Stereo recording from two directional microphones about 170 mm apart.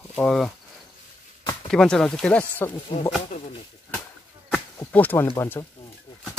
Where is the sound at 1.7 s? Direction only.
5° left (ahead or behind).